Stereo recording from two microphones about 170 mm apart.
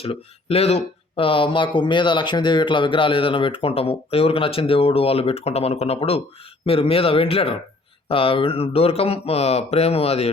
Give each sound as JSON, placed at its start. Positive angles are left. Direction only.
{"t": 0.0, "sound": "speech", "side_deg": 35}